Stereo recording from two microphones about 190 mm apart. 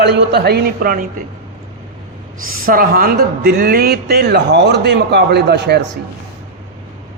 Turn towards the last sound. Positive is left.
turn(degrees=-60)  # may be behind; listen again after turning